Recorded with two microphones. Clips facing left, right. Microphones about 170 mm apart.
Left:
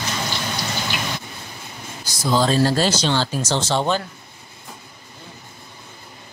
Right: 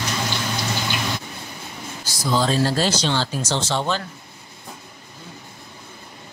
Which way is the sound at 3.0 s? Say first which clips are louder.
Left 2 dB; 50° left (ahead or behind).